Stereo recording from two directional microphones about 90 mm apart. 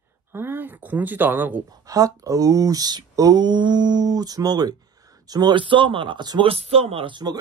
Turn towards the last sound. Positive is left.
turn(degrees=-90)